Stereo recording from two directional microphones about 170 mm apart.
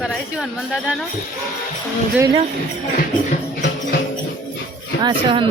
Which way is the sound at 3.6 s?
90° left.